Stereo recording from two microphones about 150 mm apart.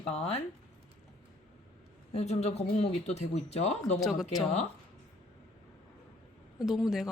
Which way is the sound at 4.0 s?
Centre (ahead or behind).